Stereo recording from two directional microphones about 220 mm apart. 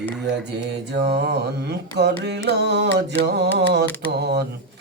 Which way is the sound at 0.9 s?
45° right (ahead or behind).